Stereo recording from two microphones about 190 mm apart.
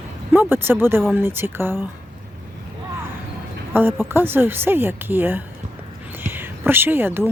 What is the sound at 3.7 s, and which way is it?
Speech, 10° right (ahead or behind).